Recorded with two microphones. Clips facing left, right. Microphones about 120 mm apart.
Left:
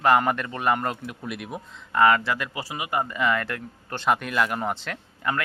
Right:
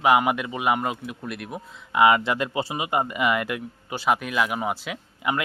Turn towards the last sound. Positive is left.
turn(degrees=-10)  # may be behind; listen again after turning